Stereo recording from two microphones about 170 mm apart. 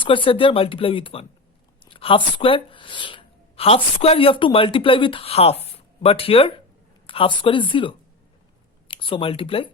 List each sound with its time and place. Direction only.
0.0 s speech: 30° left (ahead or behind)
1.8 s a sound: 30° left (ahead or behind)
4.0 s speech: 35° left (ahead or behind)